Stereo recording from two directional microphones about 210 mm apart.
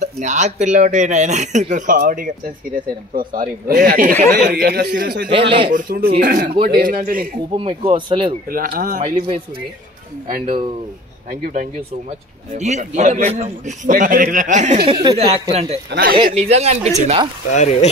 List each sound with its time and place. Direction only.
0.0 s speech: 35° right (ahead or behind); by 5.3 s 50° right (ahead or behind)
5.7 s speech: 40° right (ahead or behind)
7.5 s speech: 25° right (ahead or behind)
8.5 s speech: 45° right (ahead or behind)
9.0 s speech: 25° right (ahead or behind)
14.9 s speech: 20° right (ahead or behind)
15.1 s speech: 30° right (ahead or behind)
15.9 s speech: 45° right (ahead or behind)
16.3 s speech: 30° right (ahead or behind)
17.5 s speech: 35° left (ahead or behind)